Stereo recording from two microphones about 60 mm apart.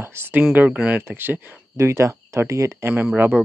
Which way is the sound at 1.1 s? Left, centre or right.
Right.